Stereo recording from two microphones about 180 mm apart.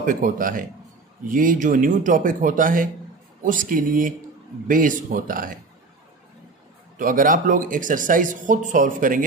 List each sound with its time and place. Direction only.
0.0 s speech: 50° right (ahead or behind)
7.0 s speech: 50° right (ahead or behind)